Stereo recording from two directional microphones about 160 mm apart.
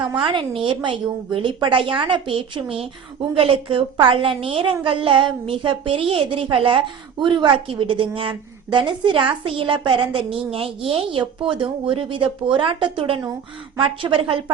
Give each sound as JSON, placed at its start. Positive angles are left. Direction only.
{"t": 0.2, "sound": "a woman's voice", "side_deg": -30}